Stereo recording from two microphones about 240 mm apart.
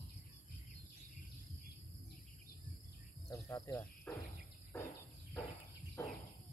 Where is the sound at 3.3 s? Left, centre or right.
Centre.